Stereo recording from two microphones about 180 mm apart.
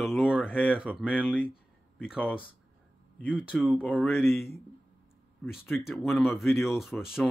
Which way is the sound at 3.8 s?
10° left (ahead or behind).